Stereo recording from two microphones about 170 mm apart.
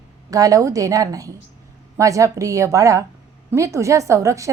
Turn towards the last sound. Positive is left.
turn(degrees=-20)  # may be behind; listen again after turning